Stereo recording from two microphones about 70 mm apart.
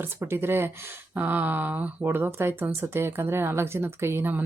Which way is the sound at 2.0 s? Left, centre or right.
Right.